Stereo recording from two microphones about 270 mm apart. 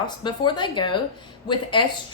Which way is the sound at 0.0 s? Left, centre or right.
Centre.